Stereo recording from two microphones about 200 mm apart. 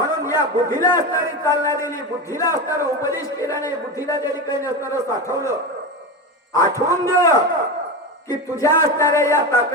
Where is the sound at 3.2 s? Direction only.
15° left (ahead or behind).